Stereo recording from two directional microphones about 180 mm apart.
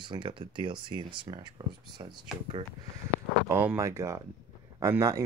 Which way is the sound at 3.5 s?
15° right (ahead or behind).